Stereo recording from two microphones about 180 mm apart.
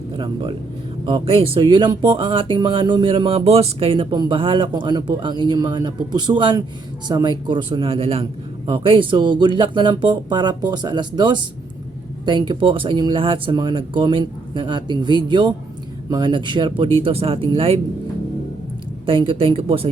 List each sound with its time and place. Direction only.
1.0 s speech: 30° right (ahead or behind)
19.0 s speech: 30° right (ahead or behind)